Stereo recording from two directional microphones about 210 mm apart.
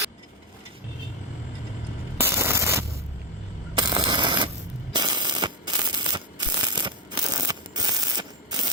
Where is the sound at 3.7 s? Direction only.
20° right (ahead or behind).